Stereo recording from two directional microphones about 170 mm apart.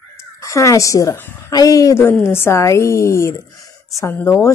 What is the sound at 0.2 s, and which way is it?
A woman's voice, 15° left (ahead or behind).